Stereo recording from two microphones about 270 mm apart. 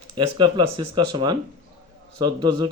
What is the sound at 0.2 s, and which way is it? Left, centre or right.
A man's voice, centre.